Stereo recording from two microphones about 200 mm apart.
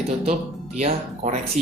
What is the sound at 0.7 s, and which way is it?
Speech, 35° right (ahead or behind).